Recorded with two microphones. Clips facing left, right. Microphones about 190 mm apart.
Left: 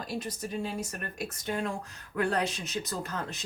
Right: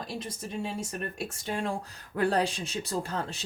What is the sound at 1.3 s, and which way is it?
Speech, 30° right (ahead or behind).